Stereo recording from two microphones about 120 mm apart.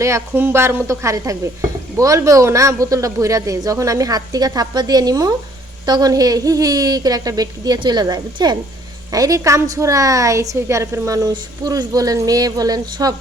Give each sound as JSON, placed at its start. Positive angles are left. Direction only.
{"t": 0.0, "sound": "a woman's voice", "side_deg": -20}